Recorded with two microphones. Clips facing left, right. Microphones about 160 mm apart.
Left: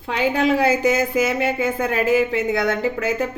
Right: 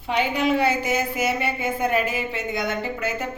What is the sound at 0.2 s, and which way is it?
A woman's voice, 90° left.